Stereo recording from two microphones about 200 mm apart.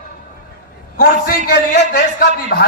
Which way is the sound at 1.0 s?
50° left (ahead or behind).